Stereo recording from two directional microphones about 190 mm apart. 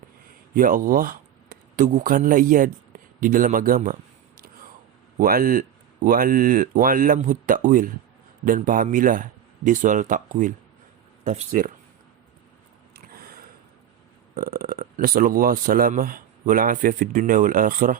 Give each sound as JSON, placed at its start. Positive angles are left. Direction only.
{"t": 0.5, "sound": "speech", "side_deg": -45}
{"t": 5.2, "sound": "speech", "side_deg": -50}
{"t": 12.9, "sound": "a sound", "side_deg": -50}
{"t": 14.3, "sound": "speech", "side_deg": -50}